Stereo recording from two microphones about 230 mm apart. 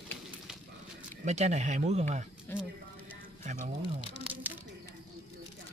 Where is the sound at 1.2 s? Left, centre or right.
Right.